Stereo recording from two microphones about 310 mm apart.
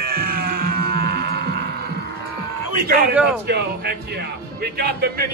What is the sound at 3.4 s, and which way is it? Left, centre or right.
Speech, right.